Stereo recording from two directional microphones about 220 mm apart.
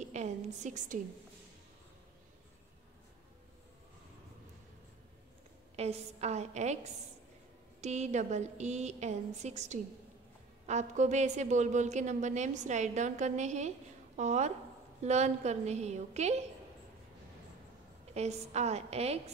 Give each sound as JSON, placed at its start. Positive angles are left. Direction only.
{"t": 0.0, "sound": "a sound", "side_deg": -30}
{"t": 5.8, "sound": "a woman's voice", "side_deg": -30}
{"t": 18.1, "sound": "a woman's voice", "side_deg": -30}